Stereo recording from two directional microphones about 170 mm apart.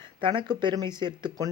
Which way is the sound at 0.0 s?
30° right (ahead or behind).